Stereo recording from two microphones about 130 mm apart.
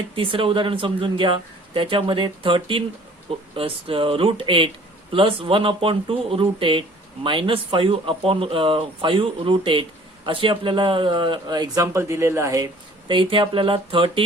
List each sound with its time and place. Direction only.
0.2 s speech: 45° right (ahead or behind); by 12.7 s 25° right (ahead or behind)
13.1 s speech: 40° right (ahead or behind)